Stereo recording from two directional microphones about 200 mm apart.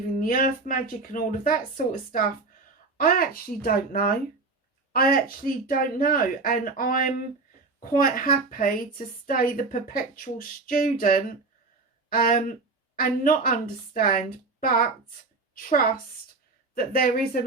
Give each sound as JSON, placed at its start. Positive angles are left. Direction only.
{"t": 0.2, "sound": "a woman's voice", "side_deg": 45}